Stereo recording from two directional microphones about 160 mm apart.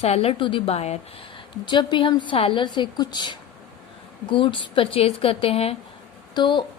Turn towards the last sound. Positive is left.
turn(degrees=30)  # may be behind; listen again after turning